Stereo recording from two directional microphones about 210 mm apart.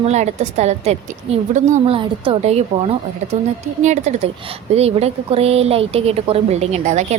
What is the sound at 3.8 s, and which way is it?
A woman's voice, 35° right (ahead or behind).